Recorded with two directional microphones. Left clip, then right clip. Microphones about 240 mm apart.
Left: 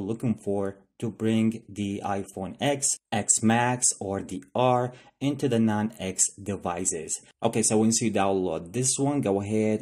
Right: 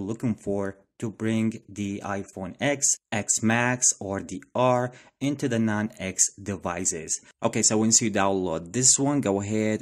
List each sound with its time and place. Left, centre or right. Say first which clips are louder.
0.0 s speech: even; centre